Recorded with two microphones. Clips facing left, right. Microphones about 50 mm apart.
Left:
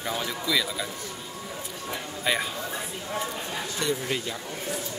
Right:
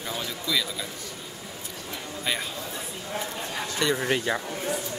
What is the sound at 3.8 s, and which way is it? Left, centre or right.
Speech, right.